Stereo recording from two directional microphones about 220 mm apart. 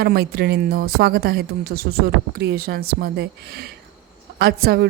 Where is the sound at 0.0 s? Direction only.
45° right (ahead or behind).